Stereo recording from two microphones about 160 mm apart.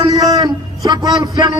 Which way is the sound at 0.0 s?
25° right (ahead or behind).